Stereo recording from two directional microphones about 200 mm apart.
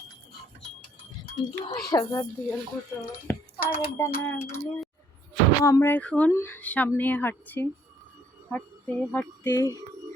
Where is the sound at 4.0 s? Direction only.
10° left (ahead or behind).